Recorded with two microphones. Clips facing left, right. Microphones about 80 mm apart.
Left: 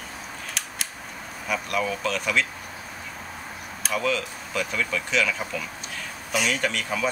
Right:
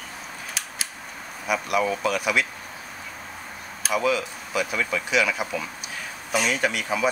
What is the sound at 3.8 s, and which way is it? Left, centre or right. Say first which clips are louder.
Speech: right 3 dB; centre.